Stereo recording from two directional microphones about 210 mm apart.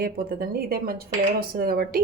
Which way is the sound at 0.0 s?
45° right (ahead or behind).